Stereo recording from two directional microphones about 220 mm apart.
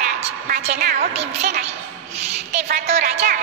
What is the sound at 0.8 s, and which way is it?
Speech, 45° right (ahead or behind).